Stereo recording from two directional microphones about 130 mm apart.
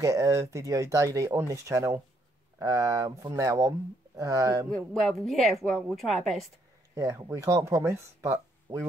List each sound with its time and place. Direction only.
0.0 s speech: 25° right (ahead or behind)
4.6 s a woman's voice: 5° left (ahead or behind)
7.0 s speech: 25° right (ahead or behind)